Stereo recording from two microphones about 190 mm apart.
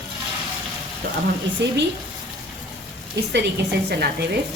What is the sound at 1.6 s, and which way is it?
Speech, 65° right (ahead or behind).